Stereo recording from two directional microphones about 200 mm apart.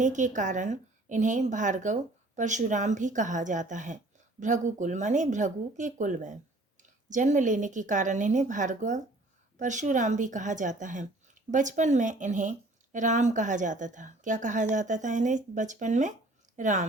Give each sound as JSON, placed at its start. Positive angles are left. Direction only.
{"t": 0.0, "sound": "a woman's voice", "side_deg": -40}